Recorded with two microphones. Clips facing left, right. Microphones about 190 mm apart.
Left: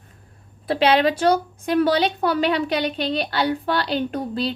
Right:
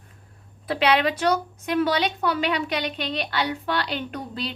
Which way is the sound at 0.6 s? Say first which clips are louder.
Left 4 dB; 30° left (ahead or behind).